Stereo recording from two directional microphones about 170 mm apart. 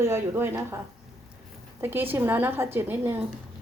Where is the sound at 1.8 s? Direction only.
10° right (ahead or behind).